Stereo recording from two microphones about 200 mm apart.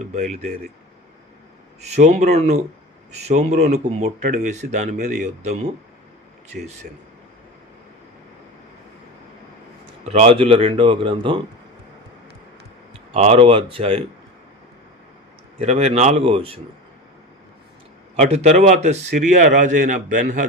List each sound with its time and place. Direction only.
0.1 s speech: 35° right (ahead or behind)
1.8 s speech: 35° right (ahead or behind)
6.8 s speech: 45° right (ahead or behind)
10.1 s speech: 30° right (ahead or behind)
13.1 s speech: 30° right (ahead or behind)
15.5 s speech: 35° right (ahead or behind)
18.2 s speech: 35° right (ahead or behind)